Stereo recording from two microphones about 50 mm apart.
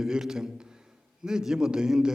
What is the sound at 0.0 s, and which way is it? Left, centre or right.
A man's voice, centre.